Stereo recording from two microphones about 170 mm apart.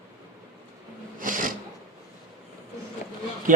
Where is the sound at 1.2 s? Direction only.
50° right (ahead or behind).